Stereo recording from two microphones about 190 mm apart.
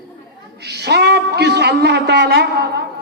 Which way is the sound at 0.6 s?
60° right (ahead or behind).